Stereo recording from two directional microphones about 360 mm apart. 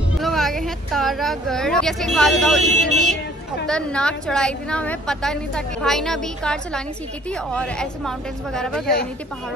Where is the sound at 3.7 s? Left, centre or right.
Centre.